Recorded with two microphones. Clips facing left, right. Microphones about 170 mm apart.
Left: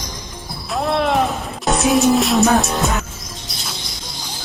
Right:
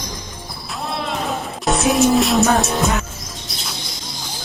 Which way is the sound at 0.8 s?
65° left (ahead or behind).